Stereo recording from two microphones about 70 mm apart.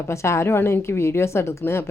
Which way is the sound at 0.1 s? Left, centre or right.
Left.